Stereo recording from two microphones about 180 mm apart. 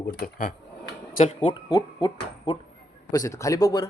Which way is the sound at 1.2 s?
30° left (ahead or behind).